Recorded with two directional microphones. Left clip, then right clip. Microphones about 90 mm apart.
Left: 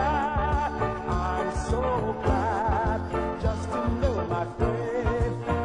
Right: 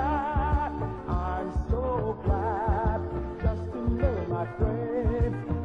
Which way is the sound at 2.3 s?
30° right (ahead or behind).